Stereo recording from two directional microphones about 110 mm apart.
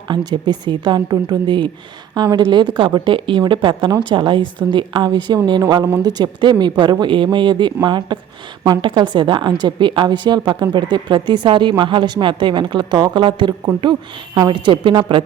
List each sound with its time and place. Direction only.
0.1 s a woman's voice: 40° right (ahead or behind)